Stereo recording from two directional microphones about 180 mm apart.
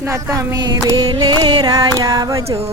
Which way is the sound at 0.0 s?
15° right (ahead or behind).